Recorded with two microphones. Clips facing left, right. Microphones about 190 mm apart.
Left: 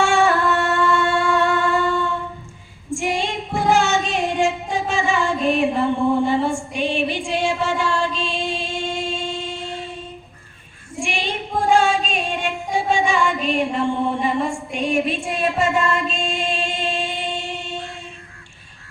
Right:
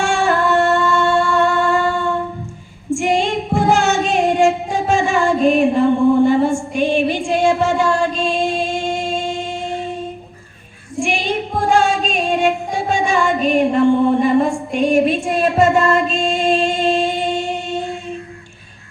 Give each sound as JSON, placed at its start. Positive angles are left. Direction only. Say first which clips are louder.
{"t": 0.0, "sound": "music", "louder": "right 1 dB", "side_deg": -50}
{"t": 1.7, "sound": "a sound", "louder": "right 3 dB", "side_deg": -45}
{"t": 2.9, "sound": "female singing", "louder": "right 6 dB", "side_deg": -50}
{"t": 6.3, "sound": "a sound", "louder": "right 5 dB", "side_deg": -45}
{"t": 11.0, "sound": "female singing", "louder": "right 5 dB", "side_deg": -45}
{"t": 11.7, "sound": "music", "louder": "right 2 dB", "side_deg": -45}